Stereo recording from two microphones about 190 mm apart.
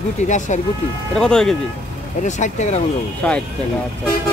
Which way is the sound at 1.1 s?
5° left (ahead or behind).